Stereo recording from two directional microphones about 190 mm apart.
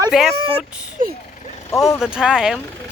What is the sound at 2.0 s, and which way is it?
Speech, 5° right (ahead or behind).